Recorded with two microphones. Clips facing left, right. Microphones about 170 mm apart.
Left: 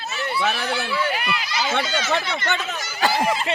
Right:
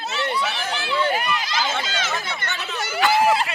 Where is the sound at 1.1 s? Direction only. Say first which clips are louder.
Right 2 dB; 45° right (ahead or behind).